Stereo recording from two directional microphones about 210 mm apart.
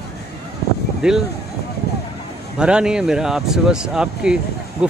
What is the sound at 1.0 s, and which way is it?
Speech, 5° right (ahead or behind).